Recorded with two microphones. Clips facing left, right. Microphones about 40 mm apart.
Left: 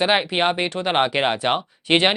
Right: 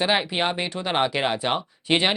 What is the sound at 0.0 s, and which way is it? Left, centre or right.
Speech, centre.